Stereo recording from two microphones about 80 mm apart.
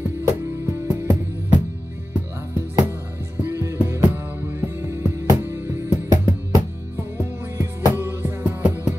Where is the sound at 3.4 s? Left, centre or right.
Right.